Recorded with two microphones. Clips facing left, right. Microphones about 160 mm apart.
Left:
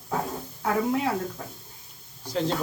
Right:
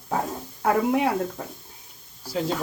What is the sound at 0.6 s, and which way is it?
Speech, 65° right (ahead or behind).